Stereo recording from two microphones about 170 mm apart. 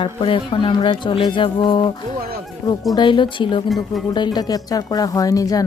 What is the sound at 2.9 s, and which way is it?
A woman's voice, 25° left (ahead or behind).